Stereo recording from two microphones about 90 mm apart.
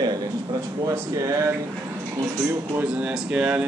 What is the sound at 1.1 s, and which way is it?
A man's voice, 35° right (ahead or behind).